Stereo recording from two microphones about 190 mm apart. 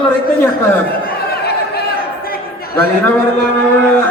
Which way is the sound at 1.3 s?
55° left (ahead or behind).